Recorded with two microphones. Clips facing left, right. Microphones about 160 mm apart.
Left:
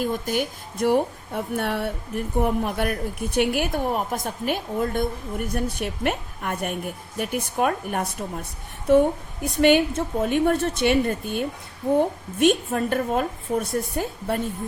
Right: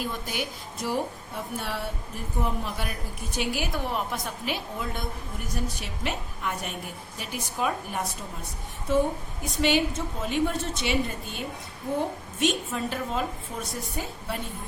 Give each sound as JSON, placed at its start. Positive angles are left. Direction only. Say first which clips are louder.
{"t": 0.0, "sound": "a woman's voice", "louder": "left 7 dB", "side_deg": 50}